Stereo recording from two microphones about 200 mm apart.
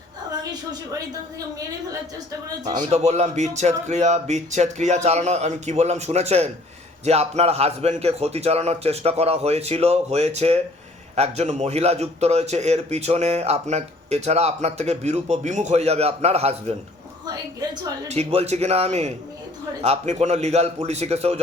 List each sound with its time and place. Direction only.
2.7 s a man's voice: 35° right (ahead or behind)
18.1 s a man's voice: 30° right (ahead or behind)